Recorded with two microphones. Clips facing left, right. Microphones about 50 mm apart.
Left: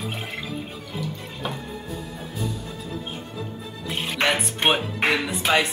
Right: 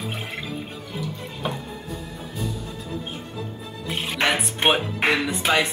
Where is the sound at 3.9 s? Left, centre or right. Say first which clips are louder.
Even; centre.